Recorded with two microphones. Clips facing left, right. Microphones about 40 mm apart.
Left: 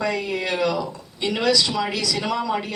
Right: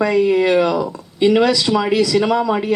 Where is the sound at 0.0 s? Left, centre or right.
Centre.